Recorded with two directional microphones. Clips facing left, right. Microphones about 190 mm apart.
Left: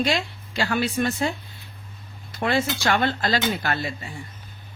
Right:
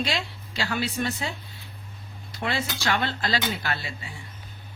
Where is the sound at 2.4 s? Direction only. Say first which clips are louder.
Left 6 dB; 50° left (ahead or behind).